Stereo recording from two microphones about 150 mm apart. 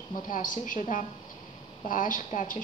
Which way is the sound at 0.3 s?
60° left (ahead or behind).